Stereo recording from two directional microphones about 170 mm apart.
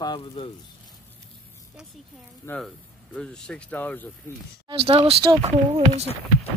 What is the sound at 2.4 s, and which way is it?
Speech, 15° left (ahead or behind).